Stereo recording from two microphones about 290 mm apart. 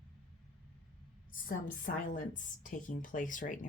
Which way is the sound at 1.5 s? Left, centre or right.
Left.